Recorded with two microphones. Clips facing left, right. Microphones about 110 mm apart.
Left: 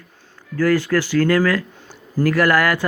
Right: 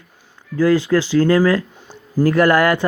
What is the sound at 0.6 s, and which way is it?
Speech, 15° right (ahead or behind).